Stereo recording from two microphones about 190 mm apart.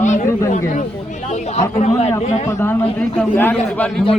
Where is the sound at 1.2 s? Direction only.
35° left (ahead or behind).